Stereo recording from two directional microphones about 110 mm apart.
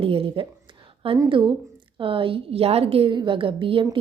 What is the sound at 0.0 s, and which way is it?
Whispering, 55° right (ahead or behind).